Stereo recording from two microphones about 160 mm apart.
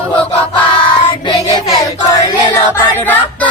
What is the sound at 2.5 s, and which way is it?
Music, 20° left (ahead or behind).